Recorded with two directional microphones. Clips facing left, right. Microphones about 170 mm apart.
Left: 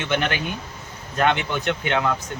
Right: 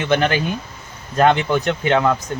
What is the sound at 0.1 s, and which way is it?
Speech, 35° right (ahead or behind).